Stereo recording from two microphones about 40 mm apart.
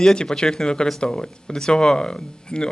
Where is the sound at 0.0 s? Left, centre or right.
Centre.